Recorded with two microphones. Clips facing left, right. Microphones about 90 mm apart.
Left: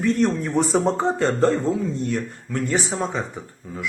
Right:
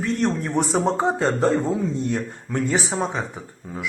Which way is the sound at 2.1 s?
20° right (ahead or behind).